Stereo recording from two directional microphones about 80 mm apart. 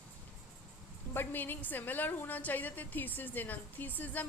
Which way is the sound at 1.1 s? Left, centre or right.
Left.